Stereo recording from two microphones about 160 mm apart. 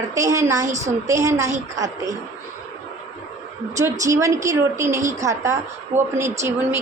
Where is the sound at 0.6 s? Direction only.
50° right (ahead or behind).